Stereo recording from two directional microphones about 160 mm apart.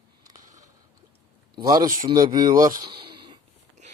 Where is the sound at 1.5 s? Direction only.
25° right (ahead or behind).